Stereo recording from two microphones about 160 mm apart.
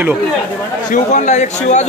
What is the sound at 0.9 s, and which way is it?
Speech, 50° left (ahead or behind).